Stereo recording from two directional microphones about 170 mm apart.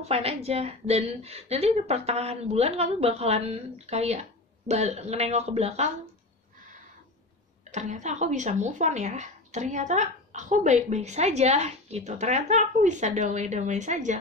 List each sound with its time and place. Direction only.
0.0 s a woman's voice: 35° right (ahead or behind)
7.7 s speech: 45° right (ahead or behind)